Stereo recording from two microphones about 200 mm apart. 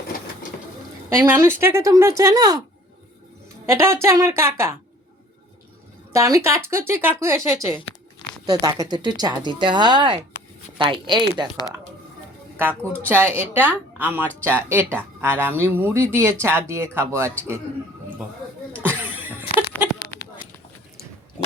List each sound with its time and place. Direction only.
1.1 s speech: 15° right (ahead or behind)
3.7 s speech: 15° right (ahead or behind)
6.1 s speech: 15° right (ahead or behind)
12.5 s speech: 10° right (ahead or behind)
18.9 s a sound: 10° right (ahead or behind)